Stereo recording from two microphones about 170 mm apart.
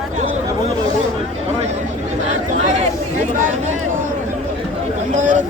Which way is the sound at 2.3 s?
45° right (ahead or behind).